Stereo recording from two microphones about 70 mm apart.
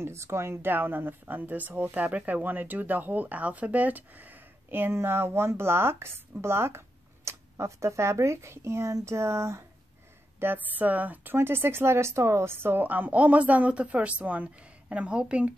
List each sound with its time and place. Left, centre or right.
0.0 s speech: right
10.4 s speech: right
11.3 s speech: right
12.8 s speech: right